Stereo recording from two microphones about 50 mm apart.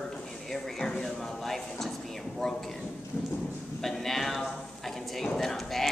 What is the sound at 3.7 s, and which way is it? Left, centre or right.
Speech, centre.